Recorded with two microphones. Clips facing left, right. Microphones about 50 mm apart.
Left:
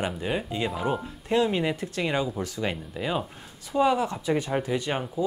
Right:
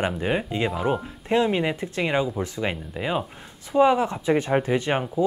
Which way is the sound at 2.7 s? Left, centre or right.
Centre.